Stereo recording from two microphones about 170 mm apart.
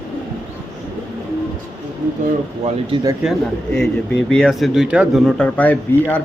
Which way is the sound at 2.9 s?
25° right (ahead or behind).